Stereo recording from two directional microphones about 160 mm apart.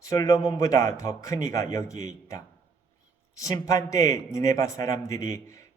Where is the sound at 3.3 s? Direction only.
20° left (ahead or behind).